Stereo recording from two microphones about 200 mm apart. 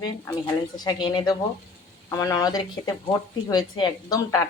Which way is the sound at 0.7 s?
20° left (ahead or behind).